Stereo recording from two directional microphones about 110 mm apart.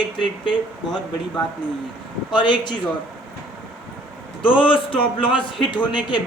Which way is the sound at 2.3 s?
45° left (ahead or behind).